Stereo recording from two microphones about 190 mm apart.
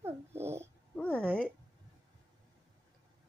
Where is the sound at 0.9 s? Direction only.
5° left (ahead or behind).